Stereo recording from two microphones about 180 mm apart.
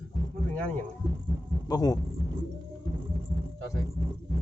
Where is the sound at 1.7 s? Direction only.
20° left (ahead or behind).